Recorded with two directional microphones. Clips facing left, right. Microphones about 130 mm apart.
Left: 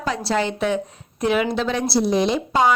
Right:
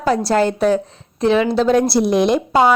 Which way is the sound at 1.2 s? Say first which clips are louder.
Right 5 dB; 30° right (ahead or behind).